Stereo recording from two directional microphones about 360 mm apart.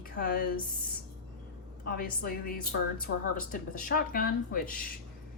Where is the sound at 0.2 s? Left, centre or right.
Left.